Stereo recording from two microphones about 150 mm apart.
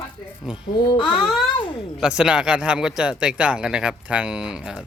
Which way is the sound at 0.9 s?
35° left (ahead or behind).